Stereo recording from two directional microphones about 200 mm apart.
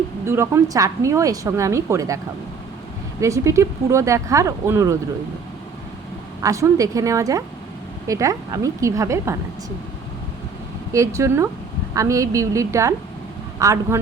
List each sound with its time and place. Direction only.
0.3 s a woman's voice: 15° right (ahead or behind)
6.4 s a woman's voice: 15° right (ahead or behind)
10.9 s a woman's voice: 15° right (ahead or behind)